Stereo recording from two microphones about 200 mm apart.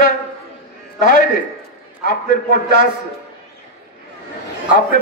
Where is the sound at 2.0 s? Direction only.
45° left (ahead or behind).